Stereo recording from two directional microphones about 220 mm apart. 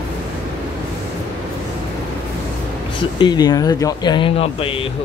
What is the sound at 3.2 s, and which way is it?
Speech, 20° left (ahead or behind).